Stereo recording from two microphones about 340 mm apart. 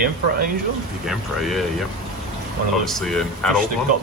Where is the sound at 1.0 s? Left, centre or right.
Centre.